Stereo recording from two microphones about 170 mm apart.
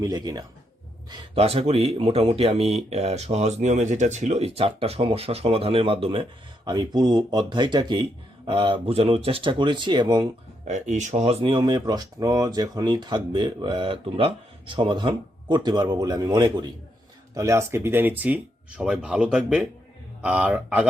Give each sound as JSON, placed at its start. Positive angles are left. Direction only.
{"t": 0.0, "sound": "speech", "side_deg": -20}
{"t": 1.4, "sound": "speech", "side_deg": -35}
{"t": 6.7, "sound": "speech", "side_deg": -25}
{"t": 10.7, "sound": "speech", "side_deg": -45}
{"t": 11.4, "sound": "speech", "side_deg": -25}